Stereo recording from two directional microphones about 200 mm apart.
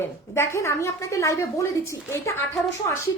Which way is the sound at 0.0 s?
15° left (ahead or behind).